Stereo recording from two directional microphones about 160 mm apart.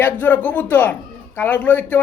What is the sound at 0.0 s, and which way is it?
A woman's voice, 10° left (ahead or behind).